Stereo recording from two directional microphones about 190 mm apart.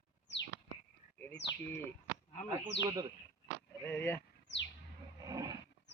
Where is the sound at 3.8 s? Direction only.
10° left (ahead or behind).